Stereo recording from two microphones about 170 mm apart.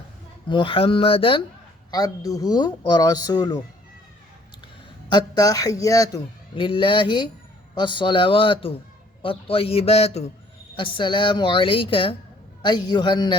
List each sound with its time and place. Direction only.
0.4 s a man's voice: 30° left (ahead or behind)
1.9 s speech: 20° left (ahead or behind)
5.0 s a man's voice: 25° left (ahead or behind)